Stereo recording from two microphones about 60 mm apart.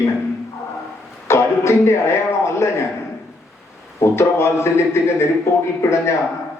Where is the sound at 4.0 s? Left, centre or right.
Left.